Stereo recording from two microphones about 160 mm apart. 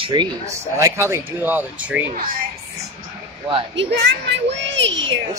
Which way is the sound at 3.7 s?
90° right.